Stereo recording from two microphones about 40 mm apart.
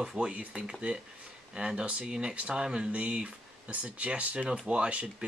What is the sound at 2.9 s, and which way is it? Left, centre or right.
Speech, right.